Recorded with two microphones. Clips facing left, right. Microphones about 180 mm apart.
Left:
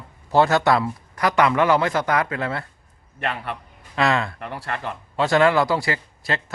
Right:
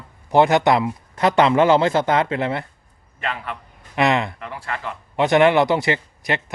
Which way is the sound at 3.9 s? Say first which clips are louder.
Right 2 dB; 20° right (ahead or behind).